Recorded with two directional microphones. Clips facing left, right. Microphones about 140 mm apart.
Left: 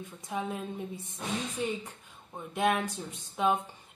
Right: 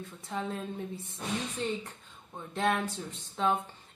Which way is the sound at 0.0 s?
15° left (ahead or behind).